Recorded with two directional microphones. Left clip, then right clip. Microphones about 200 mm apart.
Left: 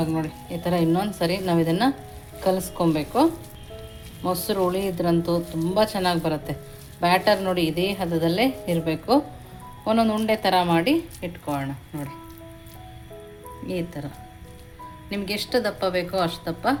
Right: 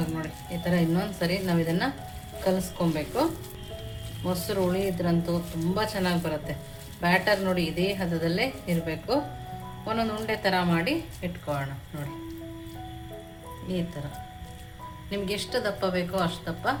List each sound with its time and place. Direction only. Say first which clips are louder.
0.0 s speech: left 7 dB; 35° left (ahead or behind)
4.3 s speech: left 4 dB; 35° left (ahead or behind)
15.1 s speech: left 4 dB; 35° left (ahead or behind)